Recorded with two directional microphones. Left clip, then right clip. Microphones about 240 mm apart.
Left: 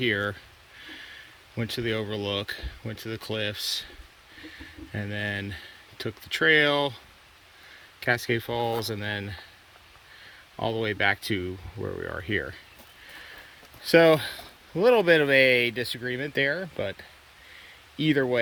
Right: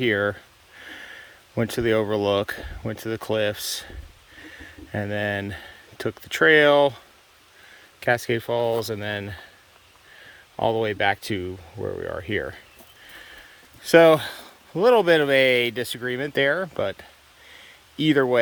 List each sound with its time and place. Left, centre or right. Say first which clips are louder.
0.0 s speech: right 4 dB; centre
10.6 s speech: right 4 dB; centre
13.8 s speech: right 4 dB; centre